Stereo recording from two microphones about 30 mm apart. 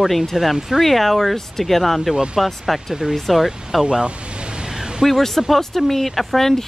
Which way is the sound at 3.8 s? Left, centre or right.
Right.